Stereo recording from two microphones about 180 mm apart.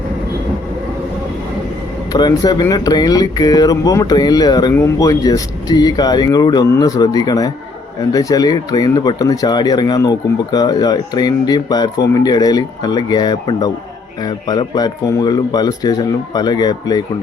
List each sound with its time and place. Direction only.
2.1 s speech: 25° left (ahead or behind)